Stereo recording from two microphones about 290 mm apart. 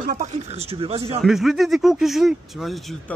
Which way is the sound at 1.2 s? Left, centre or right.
Centre.